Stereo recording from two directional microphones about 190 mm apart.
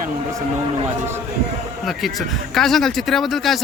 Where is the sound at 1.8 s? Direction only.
Centre (ahead or behind).